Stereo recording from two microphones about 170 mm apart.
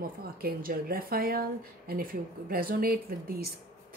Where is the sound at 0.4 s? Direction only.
60° right (ahead or behind).